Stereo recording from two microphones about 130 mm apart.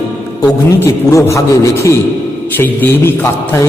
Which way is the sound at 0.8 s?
20° left (ahead or behind).